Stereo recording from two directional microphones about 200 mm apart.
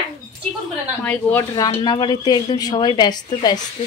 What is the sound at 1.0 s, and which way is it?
Speech, 5° left (ahead or behind).